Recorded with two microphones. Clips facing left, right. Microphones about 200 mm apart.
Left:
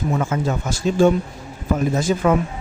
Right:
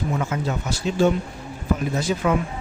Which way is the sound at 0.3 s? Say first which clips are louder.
Left 3 dB; 50° left (ahead or behind).